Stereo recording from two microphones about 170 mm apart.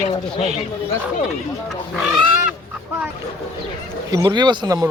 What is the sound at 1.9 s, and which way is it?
Speech, centre (ahead or behind).